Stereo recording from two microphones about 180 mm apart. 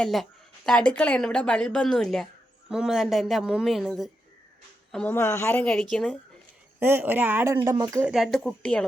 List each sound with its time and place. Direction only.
0.0 s a woman's voice: centre (ahead or behind)
6.7 s speech: 10° right (ahead or behind)
8.1 s a woman's voice: centre (ahead or behind)